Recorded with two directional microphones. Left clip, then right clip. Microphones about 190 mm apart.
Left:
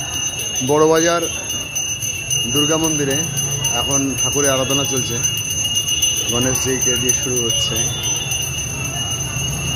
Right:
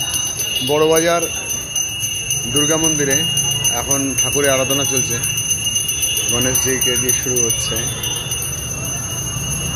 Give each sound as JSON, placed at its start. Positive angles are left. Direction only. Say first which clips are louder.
{"t": 0.7, "sound": "wind chime", "louder": "left 1 dB", "side_deg": 25}
{"t": 0.9, "sound": "speech", "louder": "right 1 dB", "side_deg": 10}
{"t": 2.5, "sound": "speech", "louder": "right 2 dB", "side_deg": 0}
{"t": 6.4, "sound": "speech", "louder": "right 1 dB", "side_deg": 5}